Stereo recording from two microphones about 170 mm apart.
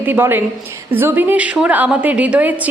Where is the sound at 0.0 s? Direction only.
10° right (ahead or behind).